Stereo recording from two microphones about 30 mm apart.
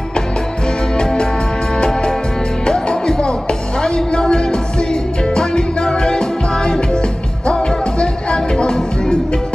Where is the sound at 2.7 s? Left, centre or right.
Left.